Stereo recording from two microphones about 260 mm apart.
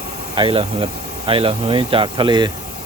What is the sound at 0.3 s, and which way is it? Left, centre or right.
Speech, centre.